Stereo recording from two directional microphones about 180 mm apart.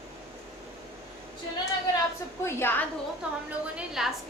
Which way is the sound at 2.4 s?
15° left (ahead or behind).